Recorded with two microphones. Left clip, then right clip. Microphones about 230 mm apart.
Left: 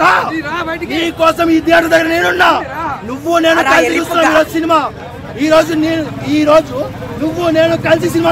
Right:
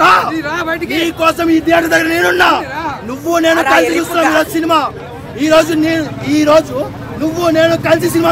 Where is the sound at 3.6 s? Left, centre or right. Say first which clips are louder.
Even; left.